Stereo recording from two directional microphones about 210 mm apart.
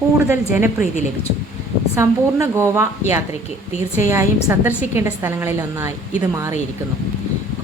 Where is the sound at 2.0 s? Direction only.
10° right (ahead or behind).